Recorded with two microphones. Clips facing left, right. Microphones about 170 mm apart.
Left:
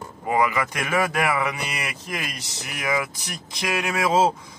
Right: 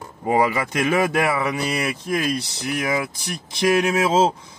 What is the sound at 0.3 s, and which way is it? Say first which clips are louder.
A man's voice: right 3 dB; 30° right (ahead or behind).